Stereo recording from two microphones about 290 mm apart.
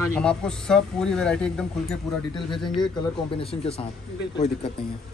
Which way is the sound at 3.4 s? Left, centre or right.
Centre.